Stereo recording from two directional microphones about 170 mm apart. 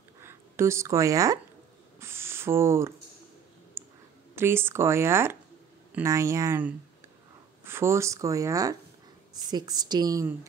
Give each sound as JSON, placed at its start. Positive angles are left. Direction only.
{"t": 0.2, "sound": "speech", "side_deg": -15}
{"t": 2.0, "sound": "a sound", "side_deg": -15}
{"t": 3.8, "sound": "clicking", "side_deg": -15}
{"t": 4.4, "sound": "speech", "side_deg": -15}